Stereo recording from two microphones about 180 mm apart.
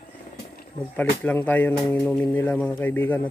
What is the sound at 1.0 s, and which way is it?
Speech, 10° left (ahead or behind).